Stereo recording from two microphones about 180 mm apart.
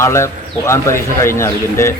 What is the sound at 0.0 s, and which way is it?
Speech, 15° left (ahead or behind).